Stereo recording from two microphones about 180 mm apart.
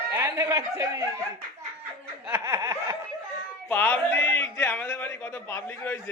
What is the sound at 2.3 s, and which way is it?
Snicker, 10° right (ahead or behind).